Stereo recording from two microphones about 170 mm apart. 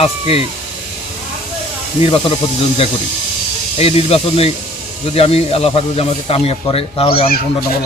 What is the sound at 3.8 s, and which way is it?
Speech, 35° left (ahead or behind).